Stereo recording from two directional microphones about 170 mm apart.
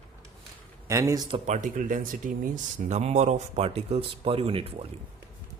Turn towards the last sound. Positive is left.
turn(degrees=-35)  # may be behind; listen again after turning